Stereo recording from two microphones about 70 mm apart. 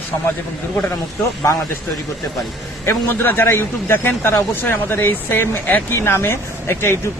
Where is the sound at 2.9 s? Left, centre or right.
Left.